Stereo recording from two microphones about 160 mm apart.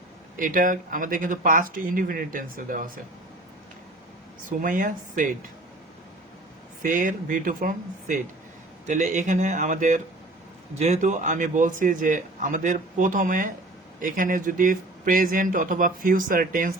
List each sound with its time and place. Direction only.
0.3 s speech: 55° right (ahead or behind)
4.4 s speech: 55° right (ahead or behind)
6.8 s speech: 55° right (ahead or behind)